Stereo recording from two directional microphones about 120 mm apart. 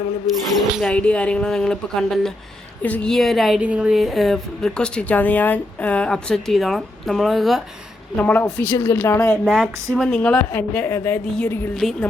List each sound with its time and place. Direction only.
0.8 s a woman's voice: 10° left (ahead or behind)
8.1 s a woman's voice: 15° left (ahead or behind)
9.2 s a woman's voice: 5° left (ahead or behind)
11.8 s a woman's voice: centre (ahead or behind)